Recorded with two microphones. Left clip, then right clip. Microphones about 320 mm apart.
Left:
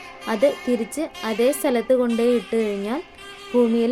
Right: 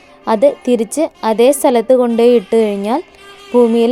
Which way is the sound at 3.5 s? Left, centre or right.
Centre.